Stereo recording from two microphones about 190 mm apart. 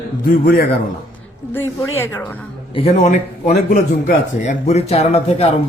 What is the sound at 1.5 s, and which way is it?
Speech, 10° left (ahead or behind).